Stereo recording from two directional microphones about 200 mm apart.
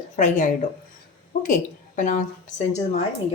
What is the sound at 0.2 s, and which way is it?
A woman's voice, 40° left (ahead or behind).